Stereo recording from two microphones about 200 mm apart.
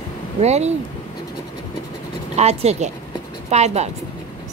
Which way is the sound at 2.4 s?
30° right (ahead or behind).